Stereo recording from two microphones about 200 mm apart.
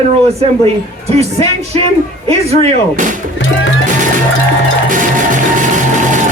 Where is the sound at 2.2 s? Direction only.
30° right (ahead or behind).